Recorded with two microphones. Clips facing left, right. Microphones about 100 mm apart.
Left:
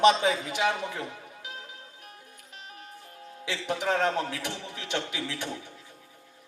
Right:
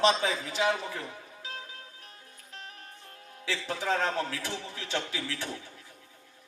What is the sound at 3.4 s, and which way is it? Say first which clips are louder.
A man's voice: left 2 dB; 20° left (ahead or behind).